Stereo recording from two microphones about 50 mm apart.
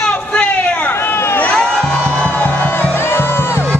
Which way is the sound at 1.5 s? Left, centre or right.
Centre.